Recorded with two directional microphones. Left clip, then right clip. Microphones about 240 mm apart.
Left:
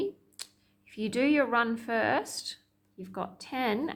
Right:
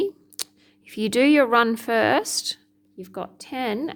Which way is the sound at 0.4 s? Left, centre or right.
Right.